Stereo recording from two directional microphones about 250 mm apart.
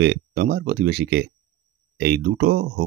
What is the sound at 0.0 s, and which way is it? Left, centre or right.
Speech, right.